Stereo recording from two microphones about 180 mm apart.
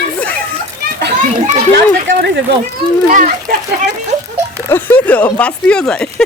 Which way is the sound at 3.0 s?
45° right (ahead or behind).